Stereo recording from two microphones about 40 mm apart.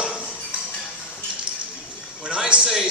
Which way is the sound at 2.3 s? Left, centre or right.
Right.